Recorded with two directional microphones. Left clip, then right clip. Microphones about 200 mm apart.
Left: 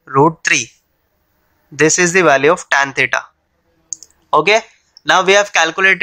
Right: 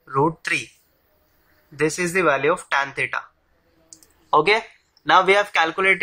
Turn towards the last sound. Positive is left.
turn(degrees=30)  # may be behind; listen again after turning